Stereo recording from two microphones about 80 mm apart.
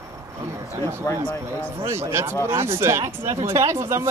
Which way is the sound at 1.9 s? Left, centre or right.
Right.